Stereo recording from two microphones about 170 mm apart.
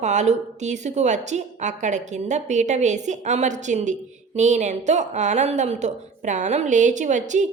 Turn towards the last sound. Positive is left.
turn(degrees=-45)  # may be behind; listen again after turning